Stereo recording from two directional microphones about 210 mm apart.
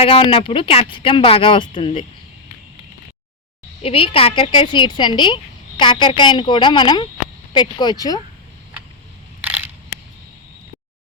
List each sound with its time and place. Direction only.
0.0 s speech: 25° left (ahead or behind)
3.8 s speech: 25° left (ahead or behind)
9.4 s crushing: 10° right (ahead or behind)